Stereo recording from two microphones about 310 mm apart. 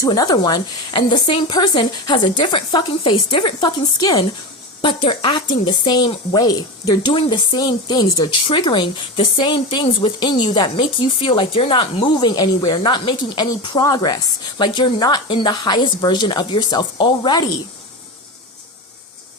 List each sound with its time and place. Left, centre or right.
0.0 s speech: centre